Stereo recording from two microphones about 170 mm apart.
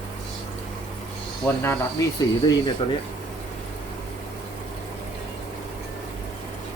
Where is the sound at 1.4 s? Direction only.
15° left (ahead or behind).